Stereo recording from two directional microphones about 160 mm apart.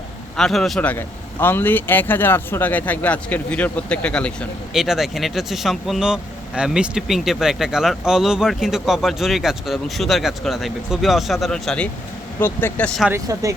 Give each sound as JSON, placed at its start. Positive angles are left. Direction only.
{"t": 0.3, "sound": "a man's voice", "side_deg": 5}
{"t": 13.1, "sound": "speech", "side_deg": -20}